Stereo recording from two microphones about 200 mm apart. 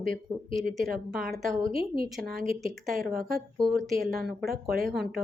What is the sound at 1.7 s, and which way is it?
Speech, 45° right (ahead or behind).